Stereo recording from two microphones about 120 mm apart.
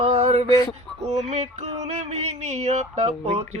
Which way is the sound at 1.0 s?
70° right (ahead or behind).